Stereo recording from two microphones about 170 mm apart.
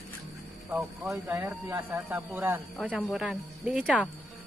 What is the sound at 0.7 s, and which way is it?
Speech, 10° right (ahead or behind).